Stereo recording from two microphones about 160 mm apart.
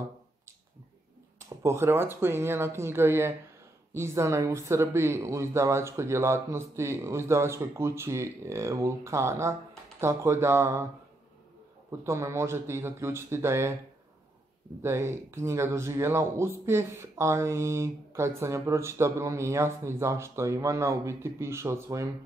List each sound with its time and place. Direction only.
1.6 s speech: 15° right (ahead or behind)
11.9 s speech: 15° right (ahead or behind)
14.8 s speech: 15° right (ahead or behind)